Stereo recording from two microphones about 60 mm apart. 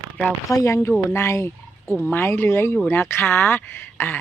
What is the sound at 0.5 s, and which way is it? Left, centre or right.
Speech, left.